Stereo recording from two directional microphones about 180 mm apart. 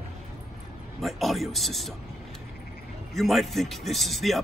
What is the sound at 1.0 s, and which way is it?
Speech, centre (ahead or behind).